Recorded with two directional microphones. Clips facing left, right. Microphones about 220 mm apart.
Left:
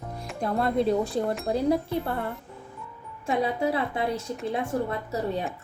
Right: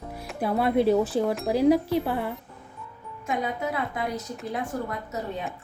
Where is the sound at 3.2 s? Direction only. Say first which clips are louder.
Left 3 dB; 30° left (ahead or behind).